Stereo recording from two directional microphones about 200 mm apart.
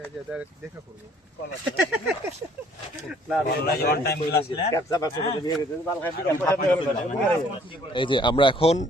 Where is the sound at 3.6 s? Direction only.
50° left (ahead or behind).